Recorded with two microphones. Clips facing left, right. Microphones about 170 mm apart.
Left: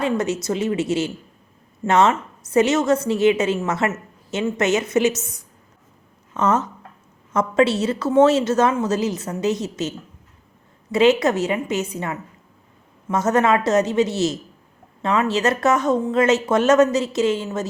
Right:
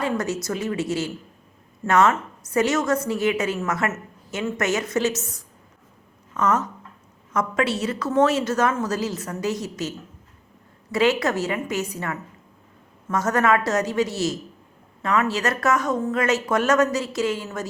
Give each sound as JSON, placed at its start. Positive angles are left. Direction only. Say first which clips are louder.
{"t": 0.0, "sound": "a woman's voice", "louder": "left 3 dB", "side_deg": 20}
{"t": 6.3, "sound": "a woman's voice", "louder": "left 2 dB", "side_deg": 25}
{"t": 10.9, "sound": "a woman's voice", "louder": "left 4 dB", "side_deg": 20}